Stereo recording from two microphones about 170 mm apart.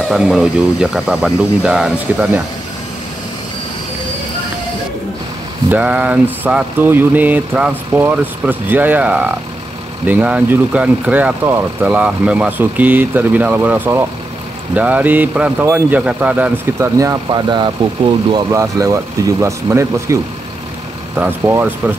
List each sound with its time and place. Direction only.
0.1 s speech: 5° right (ahead or behind)
5.7 s speech: 10° right (ahead or behind)
21.2 s speech: 10° right (ahead or behind)